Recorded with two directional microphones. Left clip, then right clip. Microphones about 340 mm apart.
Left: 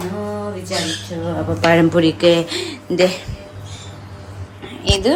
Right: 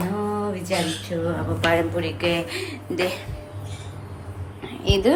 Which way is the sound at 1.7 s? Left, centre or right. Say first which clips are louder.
Left 9 dB; centre.